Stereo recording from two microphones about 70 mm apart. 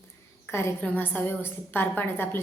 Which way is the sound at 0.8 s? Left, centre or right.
Left.